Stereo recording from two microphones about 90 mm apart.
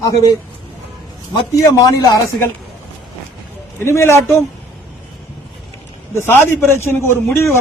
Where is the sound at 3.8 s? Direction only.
30° left (ahead or behind).